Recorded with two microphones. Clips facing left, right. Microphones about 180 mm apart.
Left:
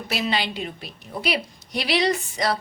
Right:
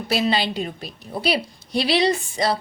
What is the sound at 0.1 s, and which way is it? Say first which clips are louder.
A woman's voice: right 4 dB; 30° right (ahead or behind).